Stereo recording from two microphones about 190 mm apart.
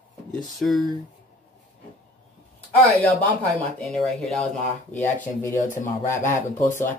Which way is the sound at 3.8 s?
Centre (ahead or behind).